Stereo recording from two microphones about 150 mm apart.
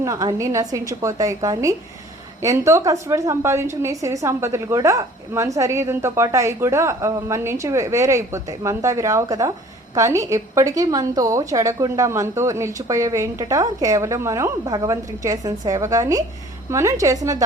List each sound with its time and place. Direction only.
0.0 s a woman's voice: 20° right (ahead or behind)